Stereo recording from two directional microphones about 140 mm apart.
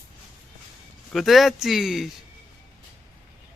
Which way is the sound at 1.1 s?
Centre (ahead or behind).